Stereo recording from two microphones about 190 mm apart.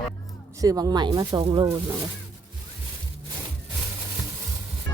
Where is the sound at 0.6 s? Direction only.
20° right (ahead or behind).